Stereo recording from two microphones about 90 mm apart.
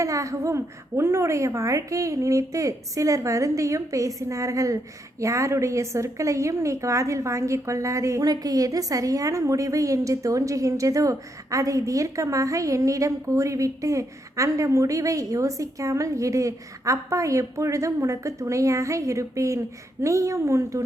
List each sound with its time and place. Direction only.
0.0 s a woman's voice: 35° right (ahead or behind)